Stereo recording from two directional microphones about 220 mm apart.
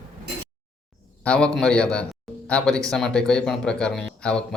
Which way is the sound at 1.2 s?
5° left (ahead or behind).